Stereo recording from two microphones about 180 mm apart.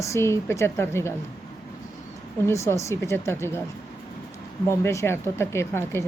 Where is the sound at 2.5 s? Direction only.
15° left (ahead or behind).